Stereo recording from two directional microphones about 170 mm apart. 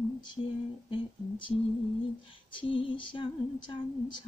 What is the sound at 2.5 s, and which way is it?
Female singing, 30° left (ahead or behind).